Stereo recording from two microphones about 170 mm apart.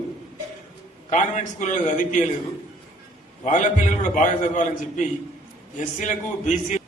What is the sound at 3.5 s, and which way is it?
A man's voice, 45° left (ahead or behind).